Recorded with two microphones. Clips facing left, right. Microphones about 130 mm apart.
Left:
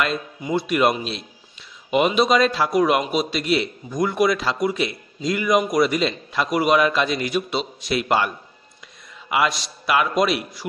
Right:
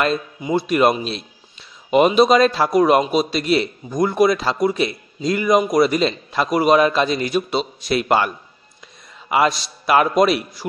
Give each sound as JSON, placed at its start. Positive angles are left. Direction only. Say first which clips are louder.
{"t": 0.6, "sound": "a man's voice", "louder": "right 3 dB", "side_deg": -40}
{"t": 9.3, "sound": "a man's voice", "louder": "right 4 dB", "side_deg": -35}